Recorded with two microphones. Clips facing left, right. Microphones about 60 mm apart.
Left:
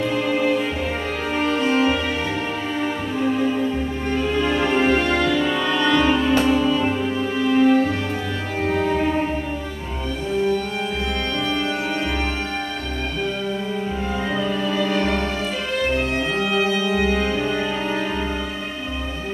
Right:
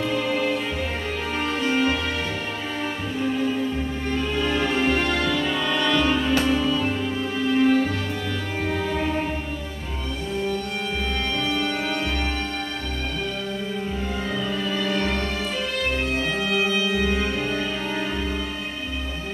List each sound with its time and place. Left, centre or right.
0.1 s music: centre
14.3 s music: centre